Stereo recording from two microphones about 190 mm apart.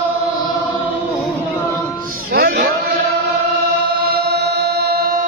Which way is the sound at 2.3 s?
55° right (ahead or behind).